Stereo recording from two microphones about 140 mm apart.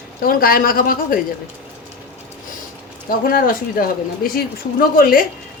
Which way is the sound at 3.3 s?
90° left.